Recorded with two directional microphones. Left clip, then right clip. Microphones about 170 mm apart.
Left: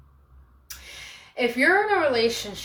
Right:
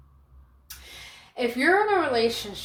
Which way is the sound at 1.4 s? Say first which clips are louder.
Left 2 dB; 25° right (ahead or behind).